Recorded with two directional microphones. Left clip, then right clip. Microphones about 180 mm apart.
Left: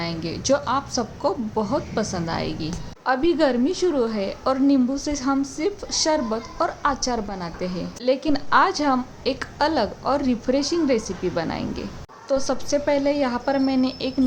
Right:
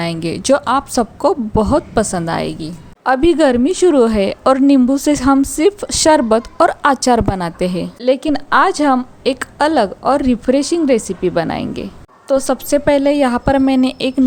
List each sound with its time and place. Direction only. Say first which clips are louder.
0.0 s speech: right 8 dB; 45° right (ahead or behind)